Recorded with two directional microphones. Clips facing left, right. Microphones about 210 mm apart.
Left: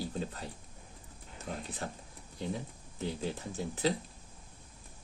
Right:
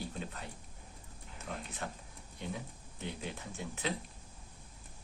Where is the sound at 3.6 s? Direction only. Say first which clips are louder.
Left 7 dB; 35° left (ahead or behind).